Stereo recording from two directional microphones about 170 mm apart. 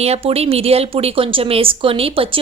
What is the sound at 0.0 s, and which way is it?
Speech, 35° right (ahead or behind).